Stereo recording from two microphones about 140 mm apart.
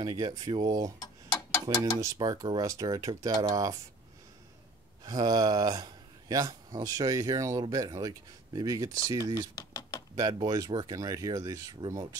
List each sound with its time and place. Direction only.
0.0 s speech: 25° right (ahead or behind)
2.0 s speech: 25° right (ahead or behind)
5.0 s speech: 30° right (ahead or behind)
9.6 s a sound: 25° left (ahead or behind)
10.1 s speech: 25° right (ahead or behind)